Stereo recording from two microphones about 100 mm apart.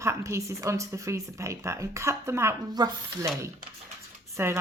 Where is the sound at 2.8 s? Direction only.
45° right (ahead or behind).